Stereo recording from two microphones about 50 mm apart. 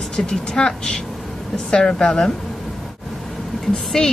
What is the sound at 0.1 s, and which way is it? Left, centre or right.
Speech, centre.